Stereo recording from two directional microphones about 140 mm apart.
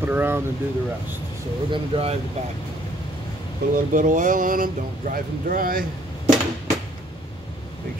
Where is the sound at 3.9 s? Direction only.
70° right (ahead or behind); by 5.8 s 90° right.